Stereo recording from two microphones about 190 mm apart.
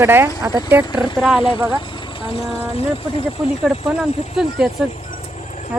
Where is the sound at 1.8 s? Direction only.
25° left (ahead or behind).